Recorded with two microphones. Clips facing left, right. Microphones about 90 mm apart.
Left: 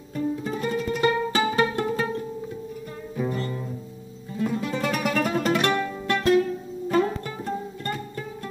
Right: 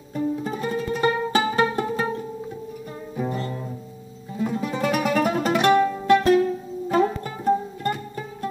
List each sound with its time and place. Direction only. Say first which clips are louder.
0.1 s music: right 2 dB; 20° right (ahead or behind)
3.2 s music: even; 15° right (ahead or behind)